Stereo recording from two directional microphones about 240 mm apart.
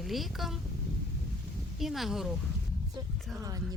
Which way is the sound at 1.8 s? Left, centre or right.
Centre.